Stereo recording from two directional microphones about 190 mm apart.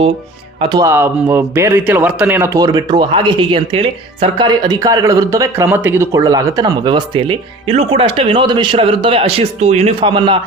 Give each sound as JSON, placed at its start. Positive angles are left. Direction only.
{"t": 0.6, "sound": "speech", "side_deg": -20}